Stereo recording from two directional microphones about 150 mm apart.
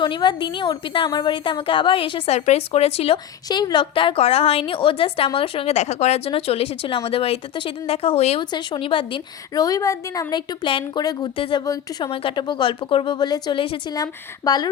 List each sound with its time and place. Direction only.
0.0 s a woman's voice: 30° left (ahead or behind)
3.5 s a woman's voice: 30° left (ahead or behind)
11.6 s speech: 25° left (ahead or behind)